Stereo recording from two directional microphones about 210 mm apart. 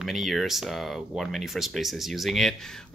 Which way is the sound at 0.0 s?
Centre (ahead or behind).